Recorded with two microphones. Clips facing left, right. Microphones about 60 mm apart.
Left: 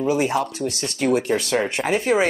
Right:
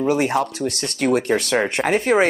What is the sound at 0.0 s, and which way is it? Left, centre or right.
Speech, right.